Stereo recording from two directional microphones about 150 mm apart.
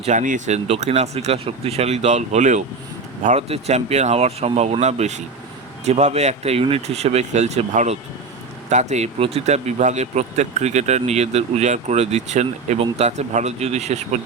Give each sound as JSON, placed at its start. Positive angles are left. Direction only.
{"t": 0.0, "sound": "speech", "side_deg": -55}